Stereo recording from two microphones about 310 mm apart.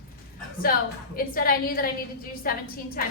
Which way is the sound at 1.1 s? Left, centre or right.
Left.